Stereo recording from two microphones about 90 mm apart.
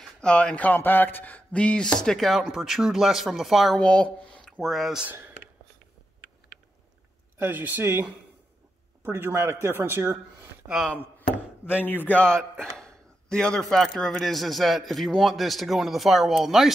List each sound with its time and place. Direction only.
0.0 s speech: 10° left (ahead or behind)
3.8 s speech: 10° left (ahead or behind)
5.1 s a sound: 25° right (ahead or behind)
7.3 s speech: 20° right (ahead or behind)
11.0 s chopping: 25° left (ahead or behind)
11.8 s a man's voice: 20° left (ahead or behind); by 16.7 s 5° right (ahead or behind)